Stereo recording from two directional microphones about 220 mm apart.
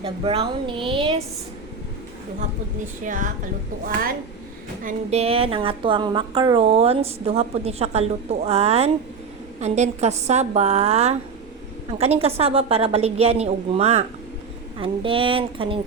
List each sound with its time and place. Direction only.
0.0 s a woman's voice: 25° right (ahead or behind)
3.0 s a woman's voice: 35° right (ahead or behind)